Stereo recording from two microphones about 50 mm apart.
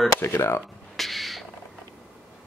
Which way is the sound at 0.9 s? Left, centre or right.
Centre.